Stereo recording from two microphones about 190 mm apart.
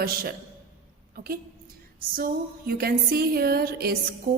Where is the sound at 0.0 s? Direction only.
50° right (ahead or behind).